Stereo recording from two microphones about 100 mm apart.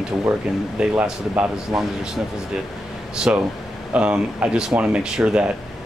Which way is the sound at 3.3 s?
15° right (ahead or behind).